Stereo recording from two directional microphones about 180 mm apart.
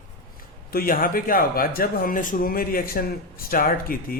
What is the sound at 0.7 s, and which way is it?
Speech, 55° left (ahead or behind).